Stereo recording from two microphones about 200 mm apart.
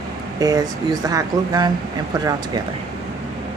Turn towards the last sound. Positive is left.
turn(degrees=-20)  # may be behind; listen again after turning